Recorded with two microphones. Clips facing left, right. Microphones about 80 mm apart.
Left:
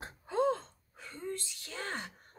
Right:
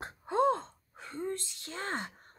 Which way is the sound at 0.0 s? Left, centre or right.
Right.